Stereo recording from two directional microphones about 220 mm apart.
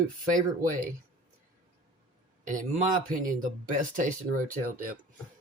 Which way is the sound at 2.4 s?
35° right (ahead or behind).